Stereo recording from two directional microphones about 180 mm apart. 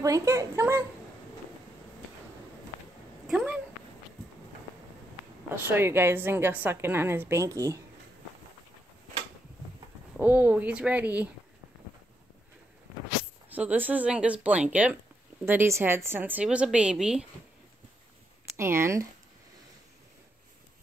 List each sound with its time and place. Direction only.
0.0 s a woman's voice: 15° right (ahead or behind)
3.3 s a sound: 5° right (ahead or behind)
5.8 s a woman's voice: 15° right (ahead or behind)
10.1 s a woman's voice: 10° right (ahead or behind)
13.5 s a woman's voice: 10° right (ahead or behind)
18.6 s a woman's voice: 15° right (ahead or behind)